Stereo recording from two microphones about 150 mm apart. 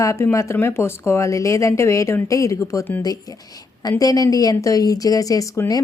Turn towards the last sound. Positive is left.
turn(degrees=25)  # may be behind; listen again after turning